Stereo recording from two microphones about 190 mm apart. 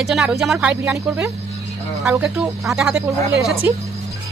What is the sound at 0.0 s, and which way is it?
Speech, centre (ahead or behind).